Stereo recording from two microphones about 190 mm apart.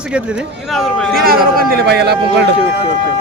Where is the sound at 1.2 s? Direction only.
50° right (ahead or behind).